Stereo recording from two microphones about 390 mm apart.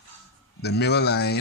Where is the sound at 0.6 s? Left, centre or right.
Left.